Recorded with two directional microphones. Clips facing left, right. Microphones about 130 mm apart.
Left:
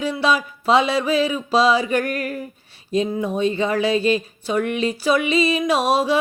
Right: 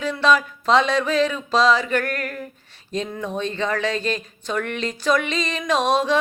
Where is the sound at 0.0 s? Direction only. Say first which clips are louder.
Right 1 dB; 10° left (ahead or behind).